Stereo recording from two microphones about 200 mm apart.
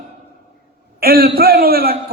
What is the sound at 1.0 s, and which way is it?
Speech, 50° right (ahead or behind).